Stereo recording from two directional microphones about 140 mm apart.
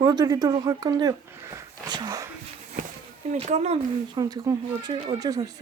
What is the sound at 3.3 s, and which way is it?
Speech, 50° right (ahead or behind).